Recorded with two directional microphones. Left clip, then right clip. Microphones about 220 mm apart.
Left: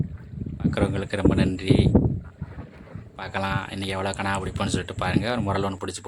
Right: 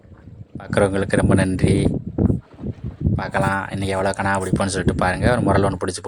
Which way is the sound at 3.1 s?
20° right (ahead or behind).